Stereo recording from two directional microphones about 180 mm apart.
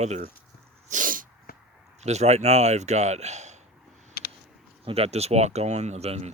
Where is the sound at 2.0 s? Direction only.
40° right (ahead or behind).